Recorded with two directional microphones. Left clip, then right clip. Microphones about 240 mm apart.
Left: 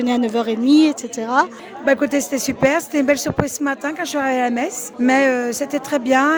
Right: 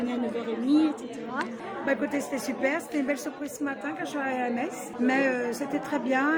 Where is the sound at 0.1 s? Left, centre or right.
Left.